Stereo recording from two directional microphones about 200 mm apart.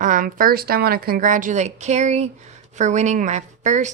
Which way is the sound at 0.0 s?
40° right (ahead or behind).